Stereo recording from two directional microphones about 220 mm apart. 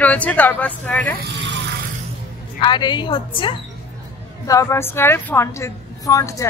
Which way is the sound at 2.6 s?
20° left (ahead or behind).